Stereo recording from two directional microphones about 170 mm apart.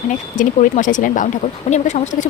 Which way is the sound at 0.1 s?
50° left (ahead or behind).